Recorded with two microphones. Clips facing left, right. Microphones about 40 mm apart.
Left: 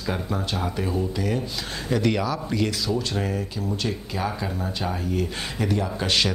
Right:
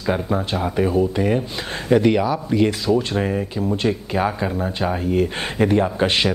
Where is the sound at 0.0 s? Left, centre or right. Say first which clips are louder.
Right 6 dB; right.